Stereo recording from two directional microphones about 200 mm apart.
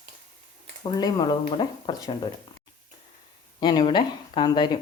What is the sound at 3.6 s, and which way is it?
Speech, 20° left (ahead or behind).